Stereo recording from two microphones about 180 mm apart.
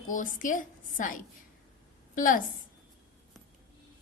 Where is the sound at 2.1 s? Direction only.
50° left (ahead or behind).